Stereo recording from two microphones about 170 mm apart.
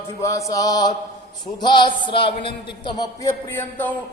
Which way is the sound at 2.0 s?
30° left (ahead or behind).